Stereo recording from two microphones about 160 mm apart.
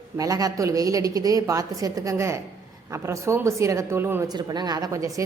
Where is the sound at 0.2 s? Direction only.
20° right (ahead or behind).